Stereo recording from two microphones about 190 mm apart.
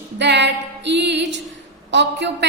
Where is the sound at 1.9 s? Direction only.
65° right (ahead or behind).